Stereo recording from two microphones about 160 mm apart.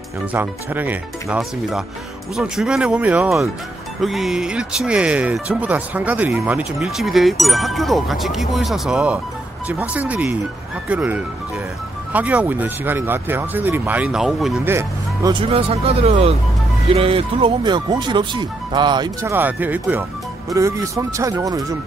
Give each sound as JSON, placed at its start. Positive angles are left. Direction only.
{"t": 0.3, "sound": "speech", "side_deg": -10}
{"t": 14.6, "sound": "speech", "side_deg": -15}
{"t": 15.3, "sound": "speech", "side_deg": -40}
{"t": 19.3, "sound": "speech", "side_deg": -10}